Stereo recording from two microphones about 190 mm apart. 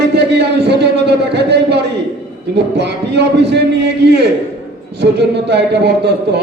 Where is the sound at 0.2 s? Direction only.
60° right (ahead or behind).